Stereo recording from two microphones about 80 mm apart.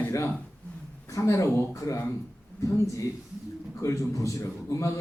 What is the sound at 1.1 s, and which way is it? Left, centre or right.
A man's voice, left.